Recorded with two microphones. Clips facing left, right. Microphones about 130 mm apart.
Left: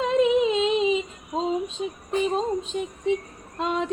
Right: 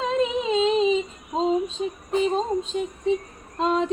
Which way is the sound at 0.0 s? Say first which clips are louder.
Left 4 dB; 5° left (ahead or behind).